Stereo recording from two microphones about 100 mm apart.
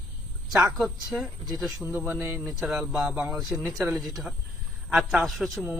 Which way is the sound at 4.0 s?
Centre (ahead or behind).